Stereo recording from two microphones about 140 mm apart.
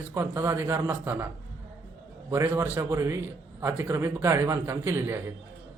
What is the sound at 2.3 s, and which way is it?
A man's voice, 15° right (ahead or behind).